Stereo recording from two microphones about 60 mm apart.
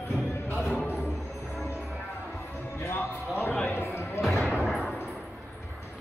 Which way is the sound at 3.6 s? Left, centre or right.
Left.